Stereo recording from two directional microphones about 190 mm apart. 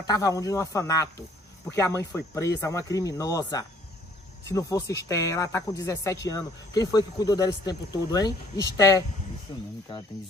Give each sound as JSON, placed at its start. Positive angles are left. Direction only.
{"t": 0.0, "sound": "speech", "side_deg": 20}